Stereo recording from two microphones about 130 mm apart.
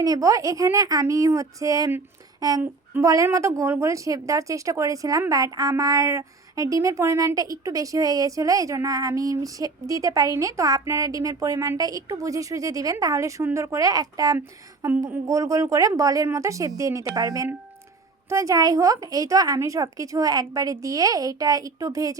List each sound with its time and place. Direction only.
0.0 s a woman's voice: 25° right (ahead or behind)